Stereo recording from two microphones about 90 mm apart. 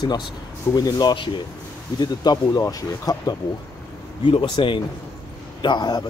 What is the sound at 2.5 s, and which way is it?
Speech, 40° left (ahead or behind).